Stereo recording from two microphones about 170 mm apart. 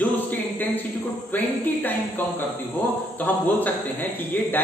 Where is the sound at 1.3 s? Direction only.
10° left (ahead or behind).